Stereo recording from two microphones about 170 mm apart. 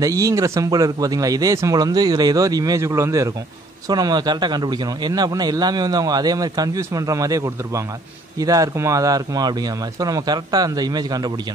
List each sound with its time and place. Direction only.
0.0 s a man's voice: 20° right (ahead or behind)